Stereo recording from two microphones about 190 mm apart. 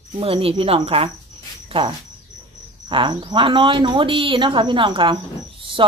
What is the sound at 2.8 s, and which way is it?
Speech, 25° right (ahead or behind).